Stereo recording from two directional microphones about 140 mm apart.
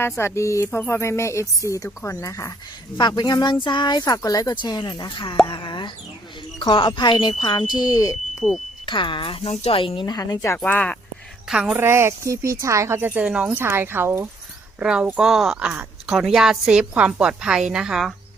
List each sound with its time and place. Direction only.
0.0 s speech: 20° left (ahead or behind); by 5.4 s 35° left (ahead or behind)
5.5 s plop: 35° left (ahead or behind)
6.6 s speech: 35° left (ahead or behind)
8.4 s speech: centre (ahead or behind)
8.9 s speech: 35° left (ahead or behind)
10.6 s speech: 10° left (ahead or behind)
11.4 s speech: 5° right (ahead or behind)
11.8 s speech: 20° right (ahead or behind)